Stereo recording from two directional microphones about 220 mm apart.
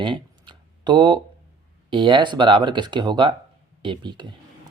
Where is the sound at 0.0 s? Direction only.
20° right (ahead or behind).